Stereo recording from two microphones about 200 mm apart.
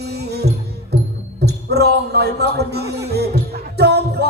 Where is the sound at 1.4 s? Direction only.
55° right (ahead or behind).